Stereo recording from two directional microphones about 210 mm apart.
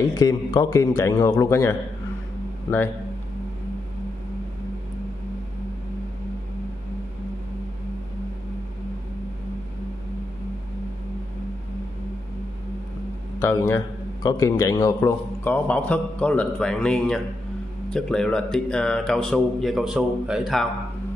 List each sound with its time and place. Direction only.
0.1 s a man's voice: 20° left (ahead or behind)
13.4 s a man's voice: 10° left (ahead or behind)